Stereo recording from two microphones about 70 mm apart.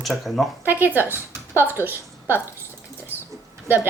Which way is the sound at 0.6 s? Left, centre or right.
Right.